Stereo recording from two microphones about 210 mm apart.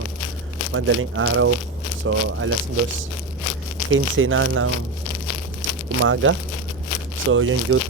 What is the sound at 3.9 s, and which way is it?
Speech, 70° right (ahead or behind).